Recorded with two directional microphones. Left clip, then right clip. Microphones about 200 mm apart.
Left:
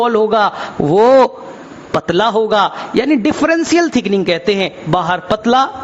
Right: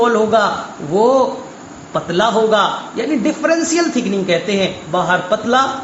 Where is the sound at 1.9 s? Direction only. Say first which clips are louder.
Left 2 dB; 55° left (ahead or behind).